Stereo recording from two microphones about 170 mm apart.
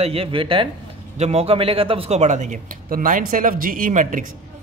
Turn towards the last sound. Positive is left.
turn(degrees=-50)  # may be behind; listen again after turning